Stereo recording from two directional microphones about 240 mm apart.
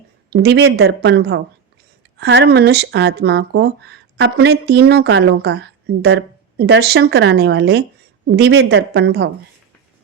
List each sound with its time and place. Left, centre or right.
0.3 s speech: right